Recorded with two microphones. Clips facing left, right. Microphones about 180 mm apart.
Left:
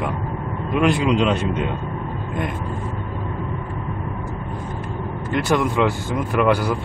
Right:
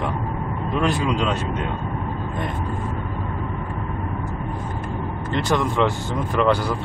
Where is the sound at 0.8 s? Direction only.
15° left (ahead or behind).